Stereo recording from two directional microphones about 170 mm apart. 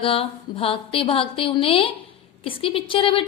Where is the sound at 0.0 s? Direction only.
30° left (ahead or behind).